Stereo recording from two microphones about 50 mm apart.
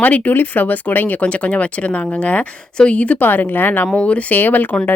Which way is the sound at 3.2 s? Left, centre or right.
Left.